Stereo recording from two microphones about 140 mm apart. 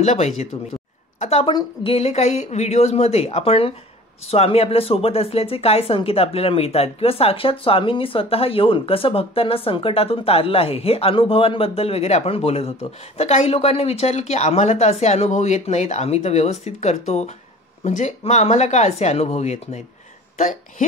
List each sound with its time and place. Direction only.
0.0 s speech: 55° left (ahead or behind)